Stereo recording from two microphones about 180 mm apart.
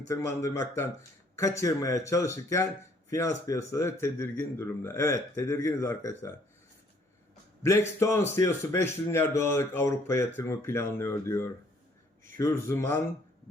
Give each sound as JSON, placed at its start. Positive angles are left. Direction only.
{"t": 0.1, "sound": "a man's voice", "side_deg": 15}
{"t": 7.6, "sound": "a man's voice", "side_deg": 15}